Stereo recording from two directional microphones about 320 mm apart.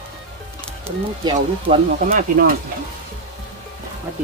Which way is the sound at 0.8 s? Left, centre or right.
Centre.